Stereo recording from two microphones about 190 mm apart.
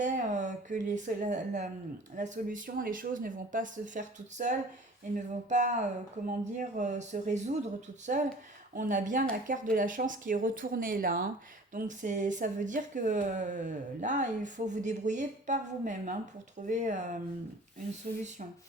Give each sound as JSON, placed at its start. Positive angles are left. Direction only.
{"t": 0.0, "sound": "a woman's voice", "side_deg": -40}
{"t": 8.7, "sound": "speech", "side_deg": -45}